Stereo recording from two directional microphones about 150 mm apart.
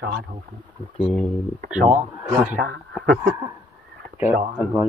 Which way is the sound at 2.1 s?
5° right (ahead or behind).